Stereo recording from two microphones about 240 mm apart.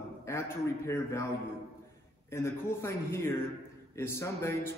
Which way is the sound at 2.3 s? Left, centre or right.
Centre.